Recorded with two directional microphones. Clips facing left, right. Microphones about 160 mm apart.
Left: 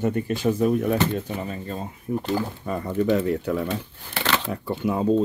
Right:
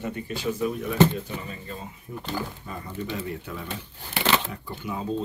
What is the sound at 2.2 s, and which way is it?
Speech, 60° left (ahead or behind).